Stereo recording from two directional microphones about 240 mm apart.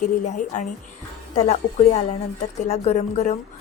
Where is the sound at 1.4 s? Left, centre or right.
Left.